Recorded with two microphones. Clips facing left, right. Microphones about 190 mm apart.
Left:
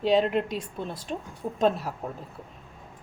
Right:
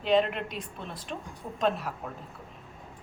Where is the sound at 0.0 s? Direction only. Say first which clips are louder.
Left 3 dB; 35° left (ahead or behind).